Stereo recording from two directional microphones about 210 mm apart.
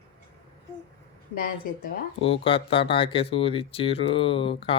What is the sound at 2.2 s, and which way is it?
Speech, 25° left (ahead or behind).